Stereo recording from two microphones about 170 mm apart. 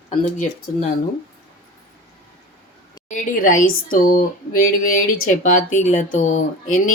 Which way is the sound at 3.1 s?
50° left (ahead or behind).